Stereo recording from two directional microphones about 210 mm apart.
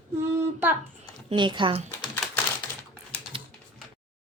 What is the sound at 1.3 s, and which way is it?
Speech, 20° right (ahead or behind).